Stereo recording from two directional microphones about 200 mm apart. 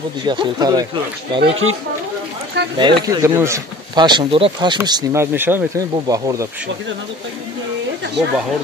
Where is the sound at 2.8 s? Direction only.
20° right (ahead or behind).